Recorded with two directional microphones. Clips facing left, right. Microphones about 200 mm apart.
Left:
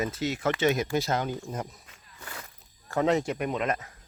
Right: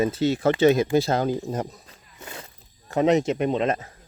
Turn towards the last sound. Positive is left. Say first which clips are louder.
# right 6 dB
turn(degrees=-30)  # may be behind; listen again after turning